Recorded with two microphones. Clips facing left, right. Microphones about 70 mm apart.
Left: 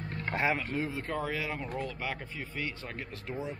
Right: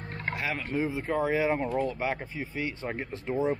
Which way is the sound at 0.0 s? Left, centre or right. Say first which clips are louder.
Even; right.